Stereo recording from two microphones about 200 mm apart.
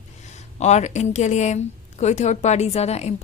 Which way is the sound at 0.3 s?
35° left (ahead or behind).